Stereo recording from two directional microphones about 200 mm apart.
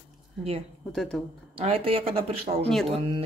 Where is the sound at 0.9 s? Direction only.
Centre (ahead or behind).